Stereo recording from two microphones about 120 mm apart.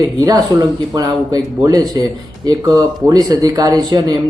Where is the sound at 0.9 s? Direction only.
30° right (ahead or behind).